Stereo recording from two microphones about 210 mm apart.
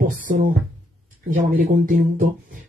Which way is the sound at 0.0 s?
40° right (ahead or behind).